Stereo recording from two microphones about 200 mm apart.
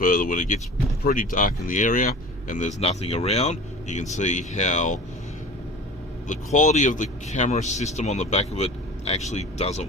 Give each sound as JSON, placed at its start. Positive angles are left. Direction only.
{"t": 0.0, "sound": "speech", "side_deg": 45}
{"t": 6.2, "sound": "speech", "side_deg": 40}